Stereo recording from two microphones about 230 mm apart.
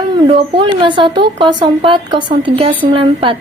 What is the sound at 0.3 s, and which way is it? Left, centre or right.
A woman's voice, right.